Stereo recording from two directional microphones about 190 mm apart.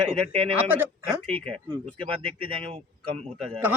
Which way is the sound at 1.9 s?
30° right (ahead or behind).